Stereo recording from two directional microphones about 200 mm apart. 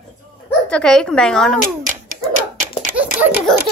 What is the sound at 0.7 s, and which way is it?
Speech, 5° left (ahead or behind).